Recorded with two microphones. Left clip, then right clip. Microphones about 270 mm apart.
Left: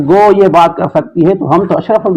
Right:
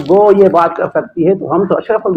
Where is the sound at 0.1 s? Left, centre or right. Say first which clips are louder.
Left 1 dB; left.